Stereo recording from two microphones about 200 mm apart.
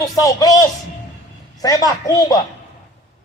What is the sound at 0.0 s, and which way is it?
A child's voice, 15° left (ahead or behind).